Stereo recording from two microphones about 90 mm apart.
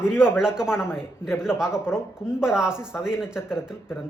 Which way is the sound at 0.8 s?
25° left (ahead or behind).